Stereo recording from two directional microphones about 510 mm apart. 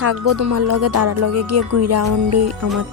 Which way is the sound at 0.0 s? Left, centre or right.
Right.